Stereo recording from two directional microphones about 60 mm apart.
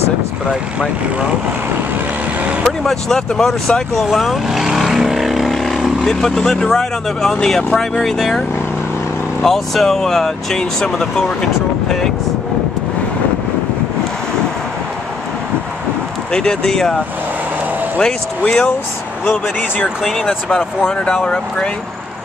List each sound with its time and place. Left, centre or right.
2.6 s vehicle: centre
6.0 s speech: centre
16.3 s speech: centre
20.0 s speech: centre
20.2 s speech: centre